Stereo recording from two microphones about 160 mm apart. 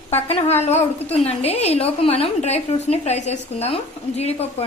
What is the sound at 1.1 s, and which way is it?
A woman's voice, 40° left (ahead or behind).